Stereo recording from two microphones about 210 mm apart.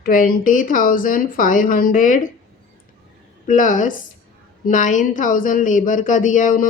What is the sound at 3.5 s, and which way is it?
Speech, 35° left (ahead or behind).